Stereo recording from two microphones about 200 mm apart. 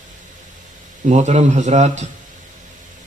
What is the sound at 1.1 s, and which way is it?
Speech, 35° right (ahead or behind).